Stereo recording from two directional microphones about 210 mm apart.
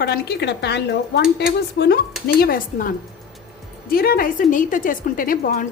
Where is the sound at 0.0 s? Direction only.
50° left (ahead or behind).